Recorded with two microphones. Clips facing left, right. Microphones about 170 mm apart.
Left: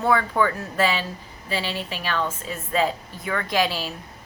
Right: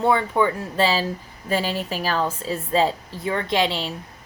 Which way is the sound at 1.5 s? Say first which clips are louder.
Right 5 dB; 45° right (ahead or behind).